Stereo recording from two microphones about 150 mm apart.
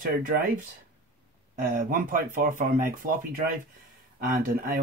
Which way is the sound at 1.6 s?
65° right (ahead or behind).